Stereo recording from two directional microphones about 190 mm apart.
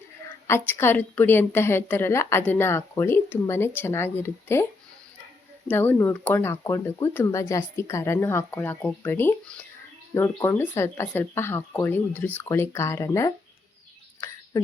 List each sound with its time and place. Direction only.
0.3 s speech: 10° left (ahead or behind)
5.6 s speech: 10° left (ahead or behind)